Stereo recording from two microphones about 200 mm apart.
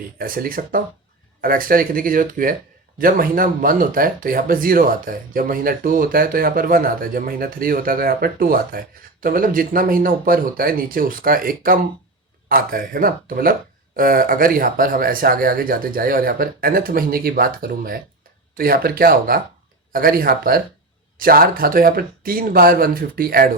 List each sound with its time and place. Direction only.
0.2 s speech: 45° right (ahead or behind)